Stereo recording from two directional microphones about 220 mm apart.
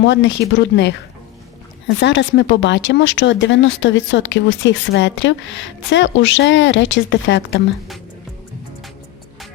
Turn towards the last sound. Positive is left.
turn(degrees=55)  # may be behind; listen again after turning